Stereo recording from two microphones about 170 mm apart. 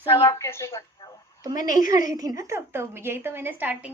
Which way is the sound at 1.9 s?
20° right (ahead or behind).